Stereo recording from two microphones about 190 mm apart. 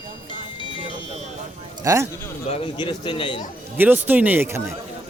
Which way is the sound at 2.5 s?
30° left (ahead or behind).